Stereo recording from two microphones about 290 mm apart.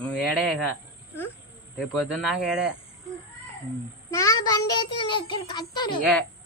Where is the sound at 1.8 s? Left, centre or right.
Centre.